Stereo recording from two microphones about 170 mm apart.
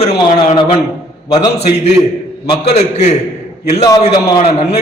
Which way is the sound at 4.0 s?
40° left (ahead or behind).